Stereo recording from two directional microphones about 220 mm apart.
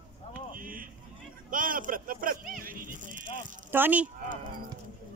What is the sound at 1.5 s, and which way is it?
Speech, 40° right (ahead or behind).